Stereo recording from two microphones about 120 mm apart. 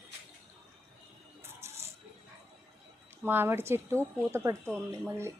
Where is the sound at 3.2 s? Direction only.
20° right (ahead or behind).